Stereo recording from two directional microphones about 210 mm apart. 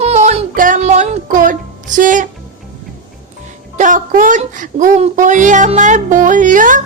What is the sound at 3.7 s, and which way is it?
Music, 35° right (ahead or behind).